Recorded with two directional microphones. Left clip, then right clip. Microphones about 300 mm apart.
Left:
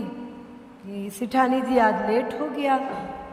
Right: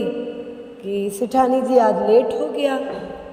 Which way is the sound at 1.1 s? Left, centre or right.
Centre.